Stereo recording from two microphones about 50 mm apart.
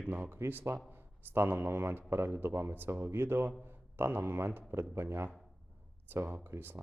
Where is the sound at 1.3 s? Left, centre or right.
Right.